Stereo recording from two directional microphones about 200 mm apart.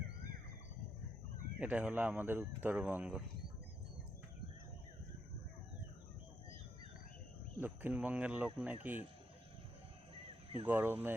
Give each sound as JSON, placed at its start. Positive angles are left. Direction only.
{"t": 1.5, "sound": "speech", "side_deg": -5}
{"t": 7.6, "sound": "speech", "side_deg": -10}
{"t": 10.2, "sound": "a sound", "side_deg": -30}
{"t": 10.7, "sound": "speech", "side_deg": -10}